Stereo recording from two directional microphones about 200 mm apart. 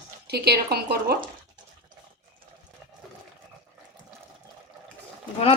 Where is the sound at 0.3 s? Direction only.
55° right (ahead or behind).